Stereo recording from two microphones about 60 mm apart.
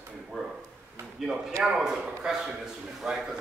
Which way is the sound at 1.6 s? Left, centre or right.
Centre.